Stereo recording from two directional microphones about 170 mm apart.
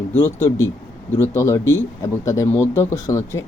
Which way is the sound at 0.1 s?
10° left (ahead or behind).